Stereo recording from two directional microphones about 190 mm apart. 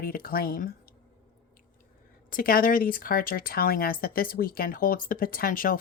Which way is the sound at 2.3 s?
50° left (ahead or behind).